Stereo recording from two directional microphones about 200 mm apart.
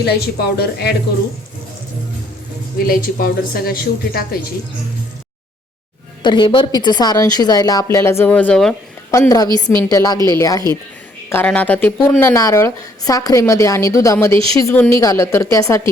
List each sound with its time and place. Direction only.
0.0 s a woman's voice: 55° left (ahead or behind)
2.7 s a woman's voice: 45° left (ahead or behind)
6.2 s a woman's voice: 25° left (ahead or behind); by 9.1 s 5° left (ahead or behind)
9.1 s a woman's voice: 15° left (ahead or behind)